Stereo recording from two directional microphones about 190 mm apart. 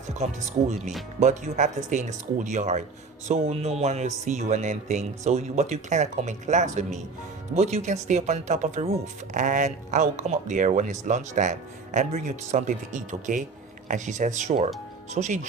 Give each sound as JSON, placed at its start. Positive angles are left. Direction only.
{"t": 1.2, "sound": "speech", "side_deg": -40}